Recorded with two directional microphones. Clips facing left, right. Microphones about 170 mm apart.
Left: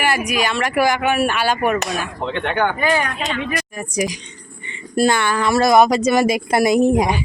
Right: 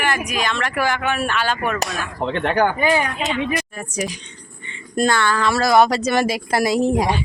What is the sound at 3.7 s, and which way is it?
Speech, 10° left (ahead or behind).